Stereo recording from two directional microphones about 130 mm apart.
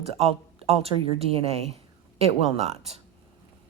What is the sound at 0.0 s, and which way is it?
Speech, 50° right (ahead or behind).